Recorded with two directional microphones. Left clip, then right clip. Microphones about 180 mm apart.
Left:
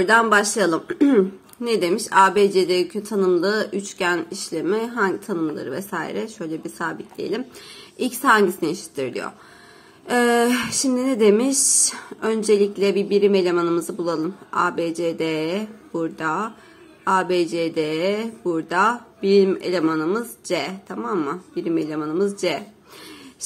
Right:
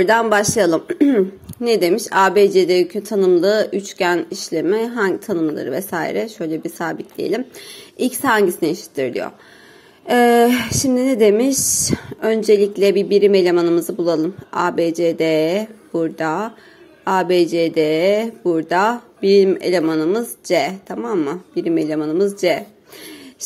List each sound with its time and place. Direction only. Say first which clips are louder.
0.0 s a woman's voice: right 2 dB; 25° right (ahead or behind)